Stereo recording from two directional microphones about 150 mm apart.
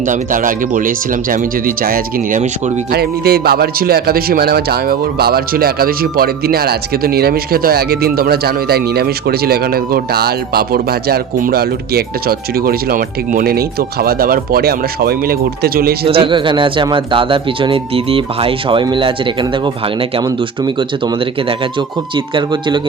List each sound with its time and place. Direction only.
0.1 s speech: 65° right (ahead or behind)
2.9 s a man's voice: 90° right
16.0 s speech: 35° right (ahead or behind)
21.8 s speech: 30° right (ahead or behind)